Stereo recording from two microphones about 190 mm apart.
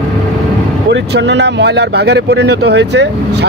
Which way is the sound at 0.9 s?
70° right (ahead or behind).